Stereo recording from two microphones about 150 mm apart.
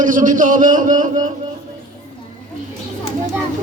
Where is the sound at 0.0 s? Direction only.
60° right (ahead or behind).